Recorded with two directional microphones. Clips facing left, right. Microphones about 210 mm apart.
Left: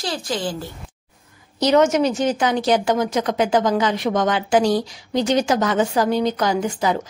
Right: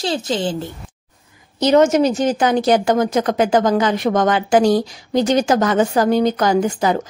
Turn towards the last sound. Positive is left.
turn(degrees=-50)  # may be behind; listen again after turning